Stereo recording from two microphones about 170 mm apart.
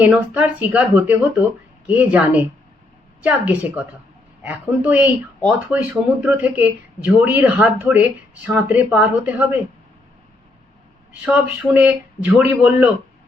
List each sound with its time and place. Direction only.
0.0 s a woman's voice: 10° right (ahead or behind)
11.3 s a woman's voice: 10° right (ahead or behind)